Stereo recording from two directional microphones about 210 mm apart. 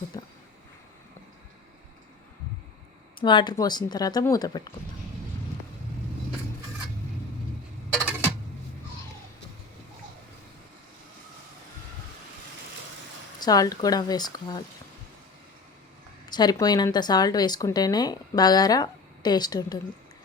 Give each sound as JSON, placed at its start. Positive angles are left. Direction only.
{"t": 0.1, "sound": "speech", "side_deg": 15}
{"t": 3.2, "sound": "speech", "side_deg": 20}
{"t": 13.4, "sound": "speech", "side_deg": 15}
{"t": 16.3, "sound": "speech", "side_deg": 20}